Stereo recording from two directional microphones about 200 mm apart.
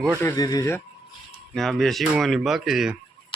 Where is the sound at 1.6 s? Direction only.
Centre (ahead or behind).